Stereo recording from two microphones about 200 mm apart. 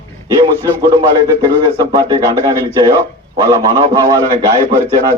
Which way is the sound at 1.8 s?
20° right (ahead or behind).